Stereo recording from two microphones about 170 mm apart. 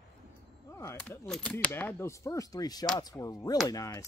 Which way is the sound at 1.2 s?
5° left (ahead or behind).